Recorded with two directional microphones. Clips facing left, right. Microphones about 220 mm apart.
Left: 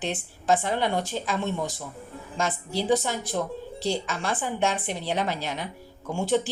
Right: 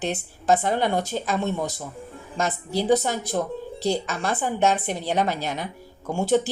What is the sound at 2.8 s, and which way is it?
A woman's voice, 40° right (ahead or behind).